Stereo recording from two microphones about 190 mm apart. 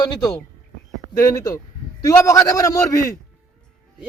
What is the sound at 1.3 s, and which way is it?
A man's voice, 20° left (ahead or behind).